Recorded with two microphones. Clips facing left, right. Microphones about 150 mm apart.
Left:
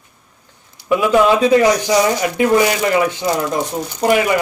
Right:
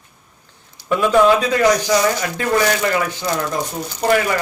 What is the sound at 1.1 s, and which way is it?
Speech, 25° left (ahead or behind).